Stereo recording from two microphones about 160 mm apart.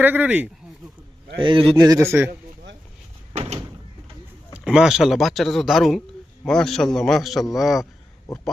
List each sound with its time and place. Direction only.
0.0 s speech: 10° right (ahead or behind)
1.4 s speech: 30° right (ahead or behind)
1.7 s speech: 20° right (ahead or behind)
4.5 s speech: 5° right (ahead or behind)